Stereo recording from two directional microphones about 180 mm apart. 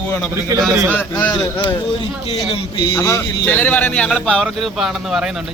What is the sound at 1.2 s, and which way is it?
Speech, 25° left (ahead or behind).